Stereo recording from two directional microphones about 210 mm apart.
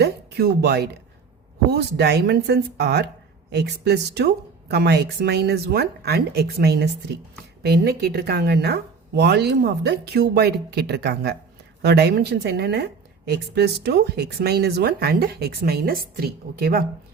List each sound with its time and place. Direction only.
0.0 s a woman's voice: 50° right (ahead or behind)